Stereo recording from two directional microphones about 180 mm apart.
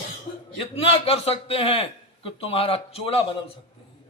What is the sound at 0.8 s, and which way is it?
A man's voice, 35° left (ahead or behind).